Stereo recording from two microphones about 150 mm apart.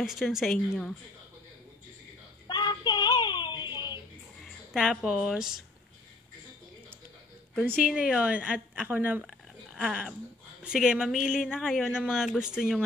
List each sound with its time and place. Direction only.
0.0 s a woman's voice: centre (ahead or behind)
2.4 s child singing: 30° left (ahead or behind)
4.5 s a woman's voice: centre (ahead or behind)
7.6 s a woman's voice: 5° right (ahead or behind)